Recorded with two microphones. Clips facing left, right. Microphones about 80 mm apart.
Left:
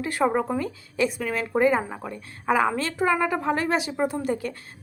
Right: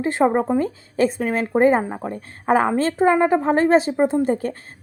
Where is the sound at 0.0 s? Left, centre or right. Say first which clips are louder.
Right 5 dB; right.